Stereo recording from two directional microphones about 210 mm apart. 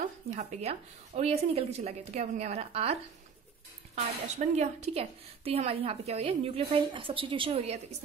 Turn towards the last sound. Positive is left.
turn(degrees=-30)  # may be behind; listen again after turning